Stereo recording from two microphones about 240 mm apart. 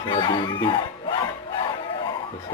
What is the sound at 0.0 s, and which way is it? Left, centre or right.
Speech, centre.